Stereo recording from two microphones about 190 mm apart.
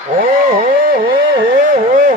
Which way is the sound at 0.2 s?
50° right (ahead or behind).